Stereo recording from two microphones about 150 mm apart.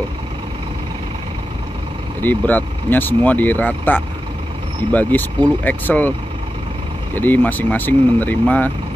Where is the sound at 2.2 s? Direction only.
10° left (ahead or behind).